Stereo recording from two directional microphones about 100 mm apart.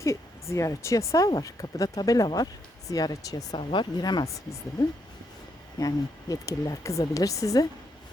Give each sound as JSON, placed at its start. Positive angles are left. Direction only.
{"t": 0.0, "sound": "speech", "side_deg": 30}
{"t": 3.6, "sound": "speech", "side_deg": 55}
{"t": 5.8, "sound": "speech", "side_deg": 35}